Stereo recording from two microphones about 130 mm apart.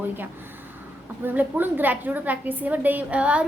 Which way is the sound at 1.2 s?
15° right (ahead or behind).